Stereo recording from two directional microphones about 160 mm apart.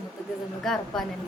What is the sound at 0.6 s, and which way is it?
Speech, centre (ahead or behind).